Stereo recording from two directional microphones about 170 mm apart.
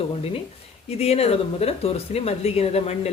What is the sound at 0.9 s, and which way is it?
Speech, 40° left (ahead or behind).